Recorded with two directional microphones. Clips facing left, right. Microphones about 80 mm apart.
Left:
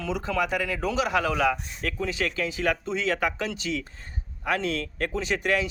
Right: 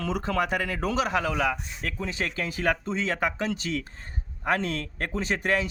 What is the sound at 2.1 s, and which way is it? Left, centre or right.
A man's voice, right.